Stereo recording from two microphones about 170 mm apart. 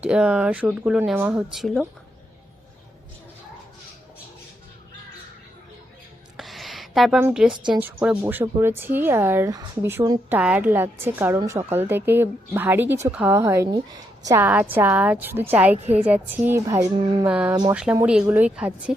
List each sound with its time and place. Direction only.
0.0 s speech: 5° right (ahead or behind)
6.3 s a sound: centre (ahead or behind)
7.2 s speech: 5° right (ahead or behind)
17.5 s speech: 20° right (ahead or behind)
18.0 s speech: 5° right (ahead or behind)